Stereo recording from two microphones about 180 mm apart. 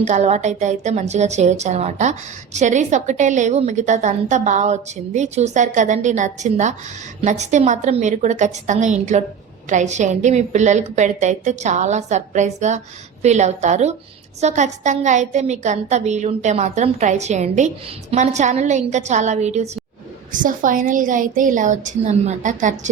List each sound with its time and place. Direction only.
0.0 s a woman's voice: 40° right (ahead or behind)